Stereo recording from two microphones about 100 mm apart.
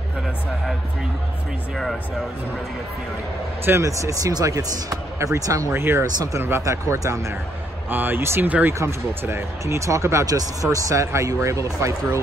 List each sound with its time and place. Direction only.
3.6 s speech: 30° right (ahead or behind)
6.0 s speech: 40° right (ahead or behind)
6.4 s speech: 25° right (ahead or behind)
7.9 s speech: 20° right (ahead or behind)